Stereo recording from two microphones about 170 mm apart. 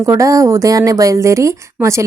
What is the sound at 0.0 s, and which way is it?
Speech, 20° right (ahead or behind).